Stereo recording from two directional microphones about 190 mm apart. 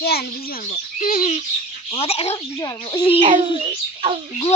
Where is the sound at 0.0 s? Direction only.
55° left (ahead or behind).